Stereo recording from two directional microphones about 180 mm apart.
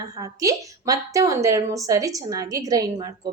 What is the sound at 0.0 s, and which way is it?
A woman's voice, 20° right (ahead or behind).